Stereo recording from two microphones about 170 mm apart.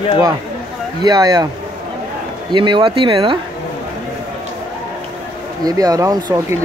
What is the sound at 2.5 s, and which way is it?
Speech, 30° right (ahead or behind).